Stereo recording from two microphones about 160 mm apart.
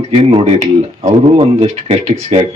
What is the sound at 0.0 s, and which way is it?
A man's voice, 35° right (ahead or behind).